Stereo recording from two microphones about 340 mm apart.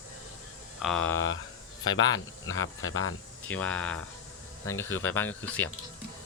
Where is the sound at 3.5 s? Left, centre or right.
Centre.